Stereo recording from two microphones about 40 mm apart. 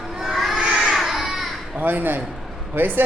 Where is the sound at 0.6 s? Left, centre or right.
Right.